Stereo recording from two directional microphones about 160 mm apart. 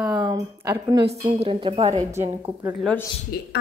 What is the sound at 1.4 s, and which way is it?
Speech, 35° right (ahead or behind).